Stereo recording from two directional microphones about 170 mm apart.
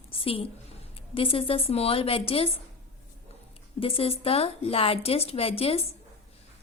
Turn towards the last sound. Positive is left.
turn(degrees=35)  # may be behind; listen again after turning